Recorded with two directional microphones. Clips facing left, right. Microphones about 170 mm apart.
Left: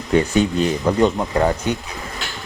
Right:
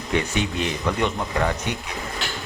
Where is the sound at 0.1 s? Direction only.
40° left (ahead or behind).